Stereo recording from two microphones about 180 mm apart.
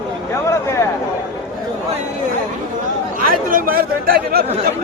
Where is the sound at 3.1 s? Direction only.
50° right (ahead or behind).